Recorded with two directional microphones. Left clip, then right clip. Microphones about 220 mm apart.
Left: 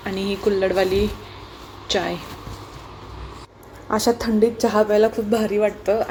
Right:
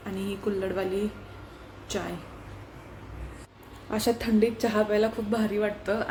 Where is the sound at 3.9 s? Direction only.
10° left (ahead or behind).